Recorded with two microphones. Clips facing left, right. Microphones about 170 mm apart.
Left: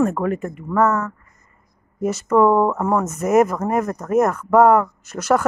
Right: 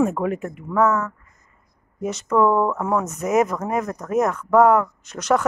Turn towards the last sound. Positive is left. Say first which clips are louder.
# left 2 dB
turn(degrees=5)  # may be behind; listen again after turning